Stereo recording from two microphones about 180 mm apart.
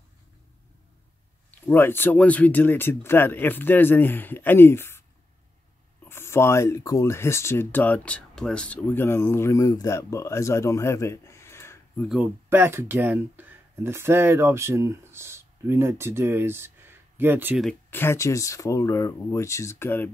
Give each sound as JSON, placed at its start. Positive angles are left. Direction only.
{"t": 1.5, "sound": "speech", "side_deg": 10}
{"t": 6.0, "sound": "speech", "side_deg": 15}
{"t": 12.1, "sound": "speech", "side_deg": -10}
{"t": 17.8, "sound": "speech", "side_deg": 10}